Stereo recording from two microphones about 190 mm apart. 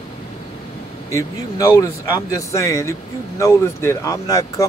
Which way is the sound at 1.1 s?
15° left (ahead or behind).